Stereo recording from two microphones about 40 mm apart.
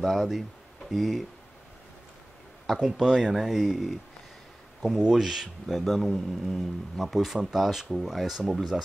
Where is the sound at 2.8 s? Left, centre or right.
Centre.